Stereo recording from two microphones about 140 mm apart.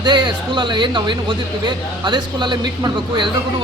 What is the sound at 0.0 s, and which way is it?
A man's voice, 35° right (ahead or behind).